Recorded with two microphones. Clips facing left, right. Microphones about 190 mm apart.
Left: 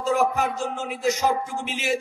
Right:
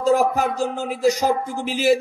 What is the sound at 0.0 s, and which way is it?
Speech, 35° right (ahead or behind).